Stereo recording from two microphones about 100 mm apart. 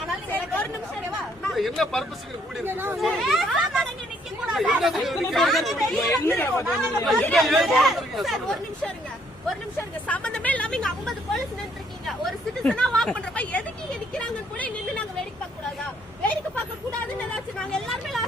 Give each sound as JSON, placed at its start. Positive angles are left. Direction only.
{"t": 0.3, "sound": "chatter", "side_deg": 15}
{"t": 1.5, "sound": "speech", "side_deg": 0}
{"t": 2.6, "sound": "speech", "side_deg": -20}
{"t": 3.0, "sound": "speech", "side_deg": 0}
{"t": 6.0, "sound": "speech", "side_deg": 20}
{"t": 6.7, "sound": "speech", "side_deg": 0}
{"t": 10.1, "sound": "a sound", "side_deg": 10}
{"t": 12.0, "sound": "speech", "side_deg": 0}
{"t": 14.1, "sound": "a sound", "side_deg": 15}
{"t": 17.7, "sound": "vehicle", "side_deg": 0}